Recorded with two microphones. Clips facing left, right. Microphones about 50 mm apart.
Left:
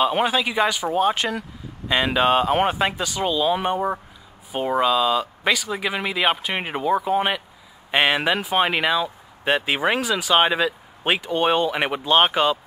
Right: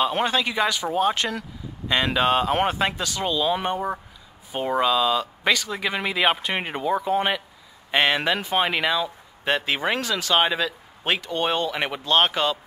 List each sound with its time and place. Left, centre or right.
0.0 s speech: centre